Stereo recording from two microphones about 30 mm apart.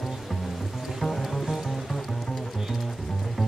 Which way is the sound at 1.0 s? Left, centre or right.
Centre.